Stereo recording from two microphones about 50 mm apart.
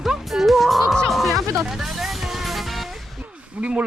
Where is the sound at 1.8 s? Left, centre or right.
Centre.